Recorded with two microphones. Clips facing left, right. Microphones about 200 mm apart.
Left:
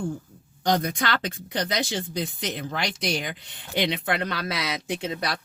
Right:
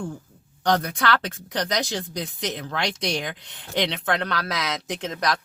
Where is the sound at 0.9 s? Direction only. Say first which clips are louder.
Right 3 dB; 70° right (ahead or behind).